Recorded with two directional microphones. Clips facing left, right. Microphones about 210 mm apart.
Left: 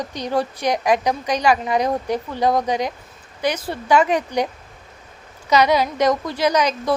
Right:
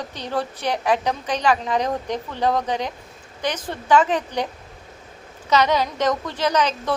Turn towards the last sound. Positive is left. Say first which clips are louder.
# left 3 dB
turn(degrees=10)  # may be behind; listen again after turning